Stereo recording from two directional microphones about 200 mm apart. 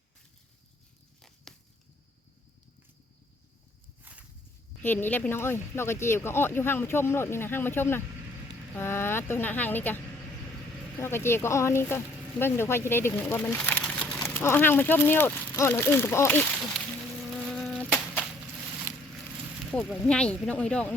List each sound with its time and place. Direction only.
1.5 s a sound: centre (ahead or behind)
4.1 s walk: 10° right (ahead or behind)
4.8 s speech: 10° left (ahead or behind)
11.0 s speech: 10° left (ahead or behind)
17.4 s a sound: centre (ahead or behind)
19.7 s speech: 5° left (ahead or behind)